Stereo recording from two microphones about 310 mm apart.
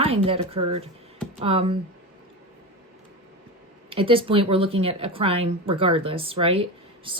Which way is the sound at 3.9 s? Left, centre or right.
Centre.